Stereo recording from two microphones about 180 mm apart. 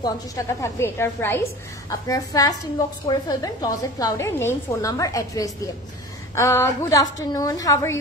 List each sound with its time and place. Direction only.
0.0 s a woman's voice: 15° left (ahead or behind)